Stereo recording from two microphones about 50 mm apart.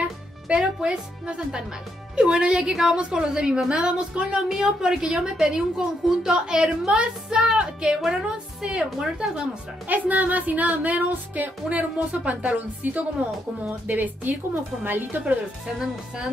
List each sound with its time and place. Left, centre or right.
0.0 s a woman's voice: centre
4.5 s a woman's voice: centre
9.8 s speech: right